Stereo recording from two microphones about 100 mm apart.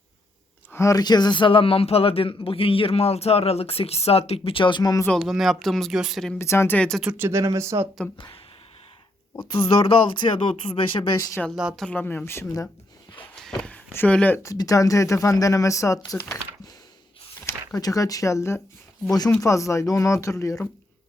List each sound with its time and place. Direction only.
0.7 s speech: 30° left (ahead or behind)
5.1 s speech: centre (ahead or behind)
6.4 s speech: 25° left (ahead or behind)
6.7 s speech: 5° left (ahead or behind)
7.2 s speech: 30° right (ahead or behind)
9.4 s speech: 60° left (ahead or behind)
11.5 s speech: 5° right (ahead or behind)
11.9 s speech: 20° left (ahead or behind)
13.1 s a sound: 5° left (ahead or behind)
13.9 s speech: 15° left (ahead or behind)
14.4 s speech: 35° left (ahead or behind)
17.7 s speech: 35° left (ahead or behind)